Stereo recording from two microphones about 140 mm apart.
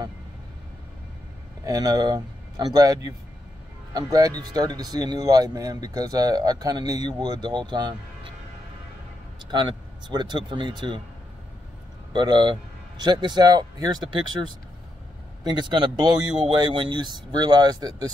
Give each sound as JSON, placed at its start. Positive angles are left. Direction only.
{"t": 1.6, "sound": "a man's voice", "side_deg": -25}
{"t": 9.4, "sound": "a man's voice", "side_deg": -35}
{"t": 12.1, "sound": "a man's voice", "side_deg": -30}